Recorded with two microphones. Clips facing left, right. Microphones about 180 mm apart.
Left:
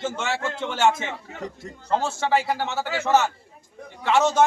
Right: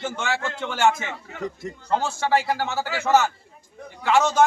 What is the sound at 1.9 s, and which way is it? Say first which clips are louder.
Speech: even; 25° left (ahead or behind).